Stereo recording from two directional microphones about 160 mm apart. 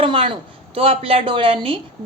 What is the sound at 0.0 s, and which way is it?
A woman's voice, 35° right (ahead or behind).